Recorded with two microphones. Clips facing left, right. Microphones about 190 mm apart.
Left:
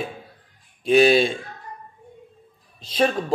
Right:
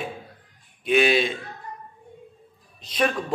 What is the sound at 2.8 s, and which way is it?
Speech, 30° left (ahead or behind).